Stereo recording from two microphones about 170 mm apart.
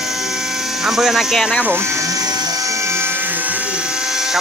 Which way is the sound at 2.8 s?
15° right (ahead or behind).